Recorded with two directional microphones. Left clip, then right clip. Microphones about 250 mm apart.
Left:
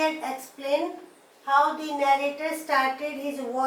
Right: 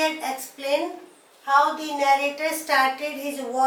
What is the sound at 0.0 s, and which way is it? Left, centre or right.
A woman's voice, centre.